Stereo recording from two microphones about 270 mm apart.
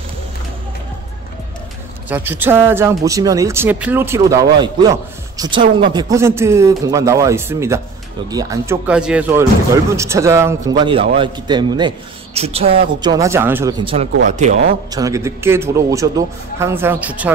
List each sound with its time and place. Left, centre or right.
2.0 s speech: centre
14.2 s speech: right
14.9 s speech: centre